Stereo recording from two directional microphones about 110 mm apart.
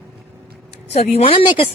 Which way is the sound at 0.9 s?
75° left (ahead or behind).